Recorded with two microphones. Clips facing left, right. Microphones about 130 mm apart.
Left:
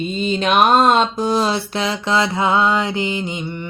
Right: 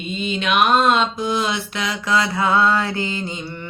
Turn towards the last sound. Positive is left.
turn(degrees=15)  # may be behind; listen again after turning